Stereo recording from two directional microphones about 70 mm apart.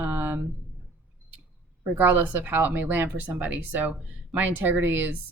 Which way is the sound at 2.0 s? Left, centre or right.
Right.